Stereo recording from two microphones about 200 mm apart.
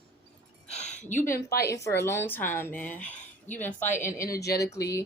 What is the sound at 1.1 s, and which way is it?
Speech, 10° left (ahead or behind).